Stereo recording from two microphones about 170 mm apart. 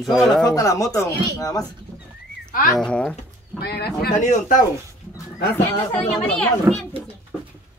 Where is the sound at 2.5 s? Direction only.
55° left (ahead or behind).